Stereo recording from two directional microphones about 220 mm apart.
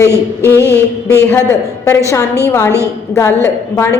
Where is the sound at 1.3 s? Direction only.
10° left (ahead or behind).